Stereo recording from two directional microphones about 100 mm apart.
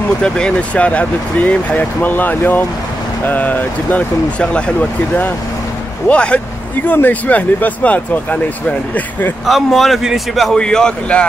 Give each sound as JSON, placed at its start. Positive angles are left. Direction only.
{"t": 0.2, "sound": "speech", "side_deg": 10}
{"t": 9.5, "sound": "speech", "side_deg": 0}